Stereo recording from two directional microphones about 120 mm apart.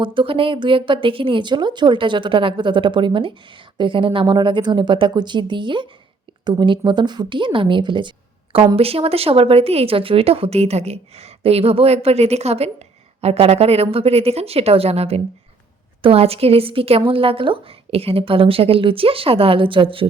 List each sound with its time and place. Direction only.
0.0 s a woman's voice: 45° right (ahead or behind)
8.7 s a woman's voice: 55° right (ahead or behind)